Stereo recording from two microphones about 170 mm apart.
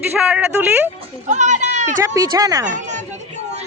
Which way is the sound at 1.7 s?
45° right (ahead or behind).